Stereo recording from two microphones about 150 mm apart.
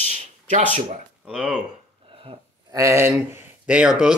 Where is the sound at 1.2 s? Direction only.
5° right (ahead or behind).